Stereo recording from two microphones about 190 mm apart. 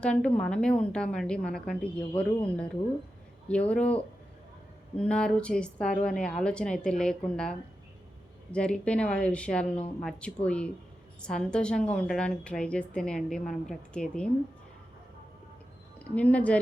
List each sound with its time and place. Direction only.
0.0 s a woman's voice: 5° left (ahead or behind)
3.5 s speech: 5° left (ahead or behind)
4.9 s a woman's voice: 5° left (ahead or behind)
8.5 s a woman's voice: 5° left (ahead or behind)
16.1 s speech: 5° left (ahead or behind)